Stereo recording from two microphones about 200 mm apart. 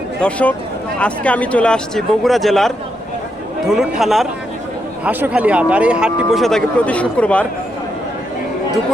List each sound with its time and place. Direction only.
0.2 s speech: 5° left (ahead or behind)